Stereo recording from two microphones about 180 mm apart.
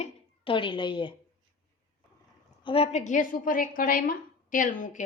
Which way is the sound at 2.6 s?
30° left (ahead or behind).